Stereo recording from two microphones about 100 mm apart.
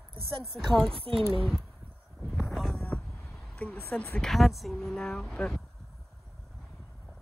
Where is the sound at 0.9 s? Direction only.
65° right (ahead or behind).